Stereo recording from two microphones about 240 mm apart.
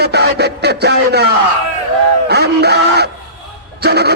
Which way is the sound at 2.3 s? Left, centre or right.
Right.